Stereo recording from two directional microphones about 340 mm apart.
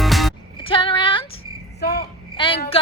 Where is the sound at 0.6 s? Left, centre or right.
Centre.